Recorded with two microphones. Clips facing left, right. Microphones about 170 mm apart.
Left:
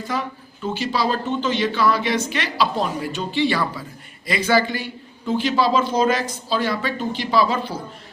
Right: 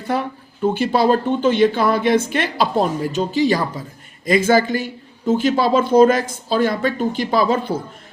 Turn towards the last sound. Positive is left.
turn(degrees=-50)  # may be behind; listen again after turning